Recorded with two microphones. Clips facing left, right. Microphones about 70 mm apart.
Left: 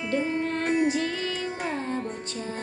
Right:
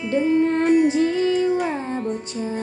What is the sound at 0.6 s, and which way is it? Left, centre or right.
Female singing, left.